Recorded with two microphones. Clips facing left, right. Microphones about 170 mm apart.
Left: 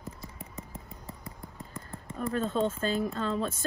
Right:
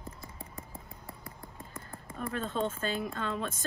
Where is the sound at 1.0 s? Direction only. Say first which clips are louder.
Left 2 dB; 20° left (ahead or behind).